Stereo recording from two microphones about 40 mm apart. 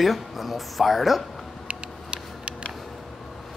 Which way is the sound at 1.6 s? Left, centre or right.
Right.